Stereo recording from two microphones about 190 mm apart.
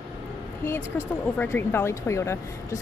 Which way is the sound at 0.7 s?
15° left (ahead or behind).